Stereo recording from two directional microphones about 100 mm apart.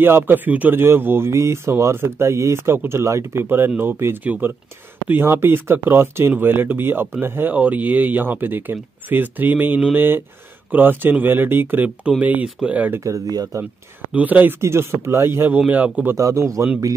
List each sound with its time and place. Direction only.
0.0 s speech: 20° right (ahead or behind)
13.0 s speech: 35° right (ahead or behind)
14.1 s speech: 15° right (ahead or behind)
16.2 s speech: 30° right (ahead or behind)